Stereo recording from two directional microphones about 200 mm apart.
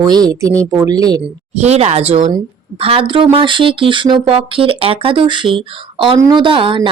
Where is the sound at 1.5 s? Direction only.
35° right (ahead or behind).